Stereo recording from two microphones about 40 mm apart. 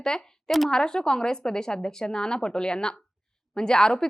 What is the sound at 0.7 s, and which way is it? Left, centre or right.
A woman's voice, centre.